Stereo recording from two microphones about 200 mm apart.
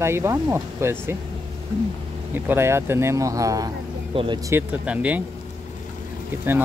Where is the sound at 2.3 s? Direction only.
10° right (ahead or behind).